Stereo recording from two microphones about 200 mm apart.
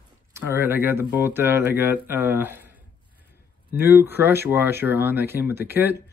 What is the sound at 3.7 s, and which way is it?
Speech, 10° right (ahead or behind).